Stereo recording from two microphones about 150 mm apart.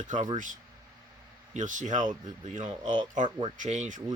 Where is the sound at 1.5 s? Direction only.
55° right (ahead or behind).